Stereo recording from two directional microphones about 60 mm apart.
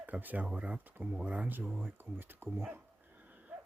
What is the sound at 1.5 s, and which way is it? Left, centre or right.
Speech, right.